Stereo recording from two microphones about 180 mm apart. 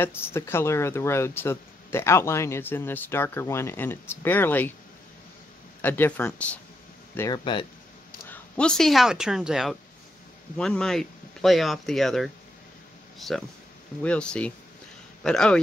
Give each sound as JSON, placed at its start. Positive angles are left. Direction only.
{"t": 0.0, "sound": "speech", "side_deg": 10}
{"t": 5.8, "sound": "speech", "side_deg": 10}
{"t": 7.2, "sound": "speech", "side_deg": 20}
{"t": 8.3, "sound": "speech", "side_deg": 5}